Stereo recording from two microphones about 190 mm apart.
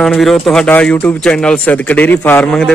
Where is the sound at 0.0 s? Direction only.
Centre (ahead or behind).